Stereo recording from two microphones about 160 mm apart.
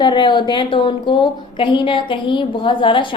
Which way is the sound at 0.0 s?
30° left (ahead or behind).